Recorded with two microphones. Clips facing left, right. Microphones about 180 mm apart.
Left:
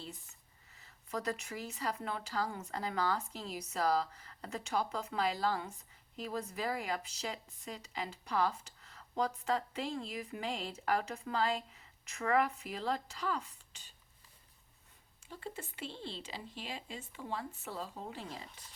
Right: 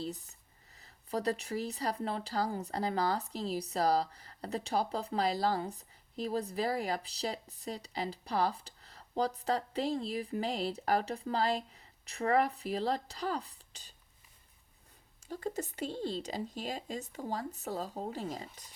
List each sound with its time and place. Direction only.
0.0 s a sound: 40° right (ahead or behind)
0.8 s a woman's voice: 35° right (ahead or behind)
15.3 s a woman's voice: 40° right (ahead or behind)